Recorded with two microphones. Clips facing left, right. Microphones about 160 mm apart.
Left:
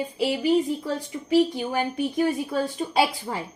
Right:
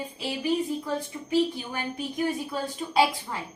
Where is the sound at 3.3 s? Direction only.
50° left (ahead or behind).